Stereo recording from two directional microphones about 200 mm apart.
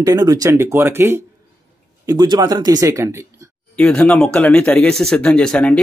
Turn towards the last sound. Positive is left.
turn(degrees=5)  # may be behind; listen again after turning